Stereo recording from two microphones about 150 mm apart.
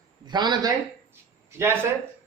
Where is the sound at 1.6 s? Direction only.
15° right (ahead or behind).